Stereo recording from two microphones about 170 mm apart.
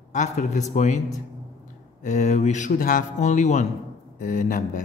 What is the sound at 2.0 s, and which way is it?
Speech, 45° left (ahead or behind).